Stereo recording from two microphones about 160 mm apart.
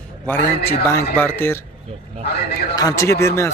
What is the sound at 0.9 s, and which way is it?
Speech, 15° left (ahead or behind).